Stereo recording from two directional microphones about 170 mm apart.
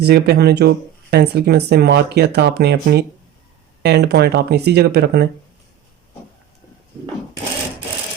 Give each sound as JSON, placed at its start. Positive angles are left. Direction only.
{"t": 0.0, "sound": "speech", "side_deg": -75}